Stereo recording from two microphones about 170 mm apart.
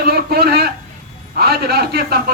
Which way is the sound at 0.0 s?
70° right (ahead or behind).